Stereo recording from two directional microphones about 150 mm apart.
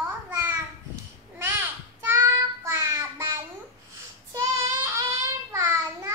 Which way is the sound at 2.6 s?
20° right (ahead or behind).